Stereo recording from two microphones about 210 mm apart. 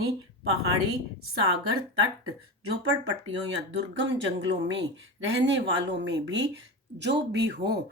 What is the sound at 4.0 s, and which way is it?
Speech, 60° right (ahead or behind).